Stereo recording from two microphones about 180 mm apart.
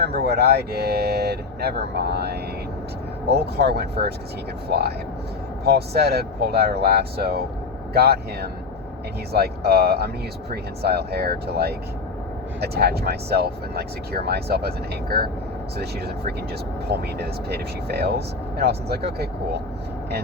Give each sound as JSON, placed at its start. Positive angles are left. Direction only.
{"t": 0.0, "sound": "speech", "side_deg": -60}
{"t": 16.9, "sound": "speech", "side_deg": -60}